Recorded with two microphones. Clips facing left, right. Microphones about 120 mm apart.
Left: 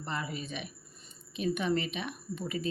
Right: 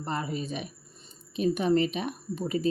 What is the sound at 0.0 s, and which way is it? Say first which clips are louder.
Speech: right 5 dB; 40° right (ahead or behind).